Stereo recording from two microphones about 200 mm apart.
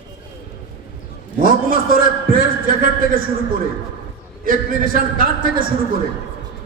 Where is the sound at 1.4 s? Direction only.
45° right (ahead or behind).